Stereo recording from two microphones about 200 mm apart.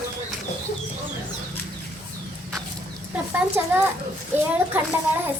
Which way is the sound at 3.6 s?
5° right (ahead or behind).